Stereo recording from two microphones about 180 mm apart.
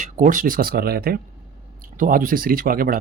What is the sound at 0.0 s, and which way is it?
Speech, 45° right (ahead or behind).